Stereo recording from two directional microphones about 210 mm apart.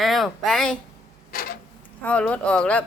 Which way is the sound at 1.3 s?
45° left (ahead or behind).